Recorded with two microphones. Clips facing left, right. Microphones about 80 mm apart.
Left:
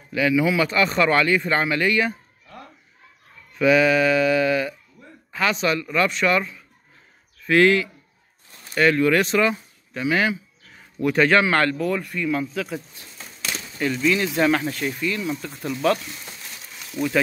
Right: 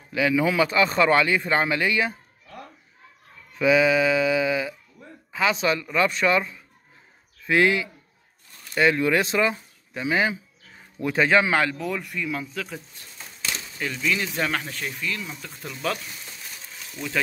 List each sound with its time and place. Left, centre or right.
0.1 s speech: right
3.5 s a sound: centre
5.3 s a man's voice: centre
11.2 s a man's voice: centre